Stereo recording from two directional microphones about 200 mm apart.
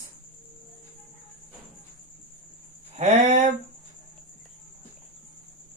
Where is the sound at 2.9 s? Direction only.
35° right (ahead or behind).